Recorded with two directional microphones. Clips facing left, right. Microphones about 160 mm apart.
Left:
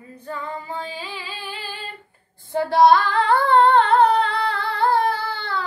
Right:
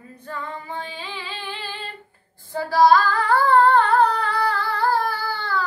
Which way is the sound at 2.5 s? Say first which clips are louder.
Left 1 dB; 25° left (ahead or behind).